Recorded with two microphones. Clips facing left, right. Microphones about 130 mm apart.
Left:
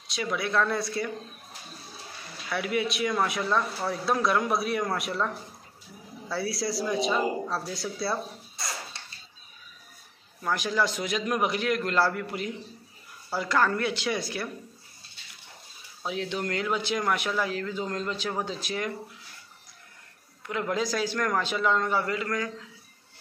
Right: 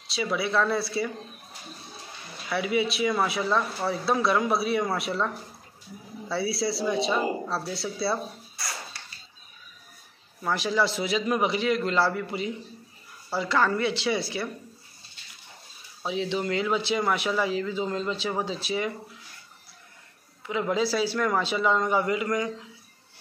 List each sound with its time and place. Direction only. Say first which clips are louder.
0.1 s speech: right 2 dB; 5° right (ahead or behind)
2.5 s speech: right 2 dB; centre (ahead or behind)
8.5 s a sound: left 1 dB; 25° left (ahead or behind)
10.4 s speech: right 2 dB; centre (ahead or behind)
16.0 s speech: right 3 dB; centre (ahead or behind)
20.4 s a man's voice: right 3 dB; 5° right (ahead or behind)